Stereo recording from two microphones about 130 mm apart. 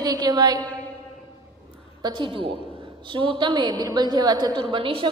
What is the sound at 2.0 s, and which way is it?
A woman's voice, 35° right (ahead or behind).